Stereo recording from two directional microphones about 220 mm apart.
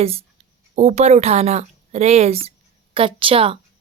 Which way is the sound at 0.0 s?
25° right (ahead or behind).